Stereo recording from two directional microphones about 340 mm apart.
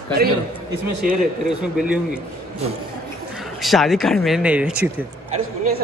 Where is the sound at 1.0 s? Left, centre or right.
Right.